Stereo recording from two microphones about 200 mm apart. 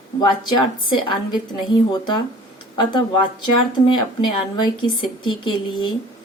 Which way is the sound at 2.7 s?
20° left (ahead or behind).